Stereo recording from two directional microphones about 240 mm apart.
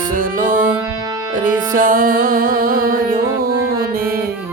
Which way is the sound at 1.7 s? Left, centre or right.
Right.